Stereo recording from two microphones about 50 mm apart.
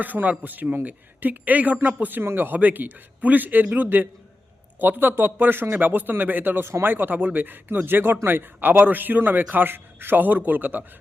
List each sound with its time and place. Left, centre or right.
0.0 s speech: right